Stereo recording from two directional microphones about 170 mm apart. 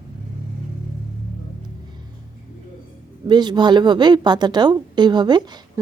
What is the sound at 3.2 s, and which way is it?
A woman's voice, 25° right (ahead or behind).